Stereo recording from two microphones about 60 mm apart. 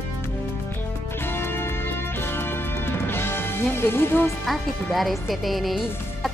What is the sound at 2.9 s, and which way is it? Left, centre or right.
Music, left.